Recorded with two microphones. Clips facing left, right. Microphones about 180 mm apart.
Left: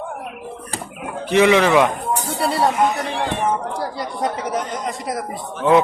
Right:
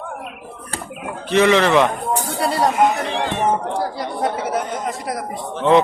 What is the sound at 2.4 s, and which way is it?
Speech, centre (ahead or behind).